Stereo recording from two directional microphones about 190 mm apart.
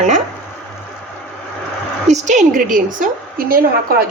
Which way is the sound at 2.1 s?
40° right (ahead or behind).